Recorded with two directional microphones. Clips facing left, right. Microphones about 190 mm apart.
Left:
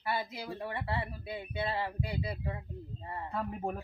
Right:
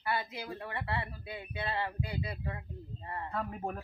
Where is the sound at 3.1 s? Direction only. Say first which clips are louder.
Even; 10° left (ahead or behind).